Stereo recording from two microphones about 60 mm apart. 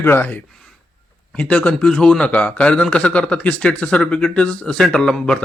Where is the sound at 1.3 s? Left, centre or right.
Left.